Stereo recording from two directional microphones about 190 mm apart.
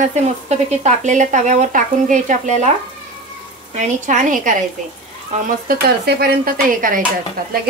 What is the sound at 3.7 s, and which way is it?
Speech, 40° right (ahead or behind).